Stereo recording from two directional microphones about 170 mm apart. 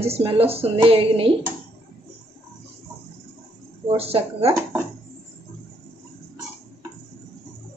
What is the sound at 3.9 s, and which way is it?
Speech, 35° right (ahead or behind).